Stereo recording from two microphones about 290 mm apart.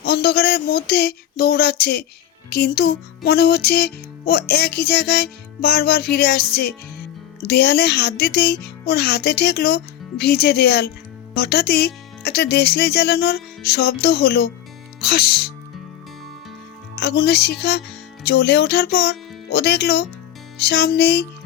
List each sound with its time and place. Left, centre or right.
0.0 s music: left
16.9 s music: left